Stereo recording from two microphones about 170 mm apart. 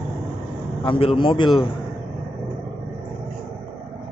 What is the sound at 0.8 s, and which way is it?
Speech, 30° left (ahead or behind).